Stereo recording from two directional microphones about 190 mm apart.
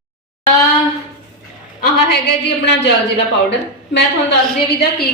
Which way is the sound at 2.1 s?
60° left (ahead or behind).